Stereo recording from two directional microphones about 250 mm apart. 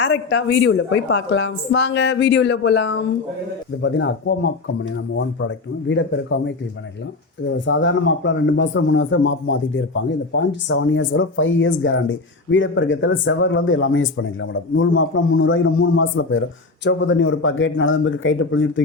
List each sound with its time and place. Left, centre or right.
0.0 s a man's voice: left
7.6 s a man's voice: left